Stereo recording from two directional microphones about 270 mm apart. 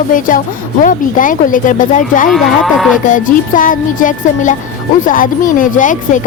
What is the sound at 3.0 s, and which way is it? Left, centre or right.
Speech, left.